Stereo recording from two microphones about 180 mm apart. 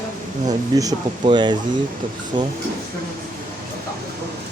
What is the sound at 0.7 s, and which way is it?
Speech, 20° right (ahead or behind).